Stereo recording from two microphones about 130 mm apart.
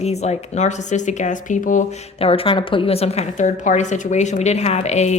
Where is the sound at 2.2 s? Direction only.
45° left (ahead or behind).